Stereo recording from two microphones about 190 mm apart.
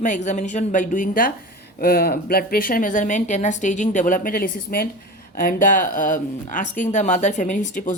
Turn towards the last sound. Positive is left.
turn(degrees=40)  # may be behind; listen again after turning